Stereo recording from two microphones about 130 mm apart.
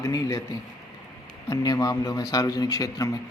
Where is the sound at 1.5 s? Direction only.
30° left (ahead or behind).